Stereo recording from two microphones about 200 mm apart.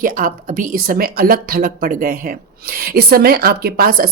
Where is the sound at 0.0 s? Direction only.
40° right (ahead or behind).